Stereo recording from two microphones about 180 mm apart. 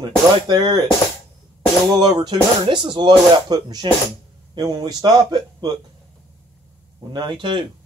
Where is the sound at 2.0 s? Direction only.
20° right (ahead or behind).